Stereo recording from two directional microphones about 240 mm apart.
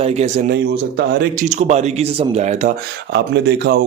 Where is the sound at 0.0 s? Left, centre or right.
Right.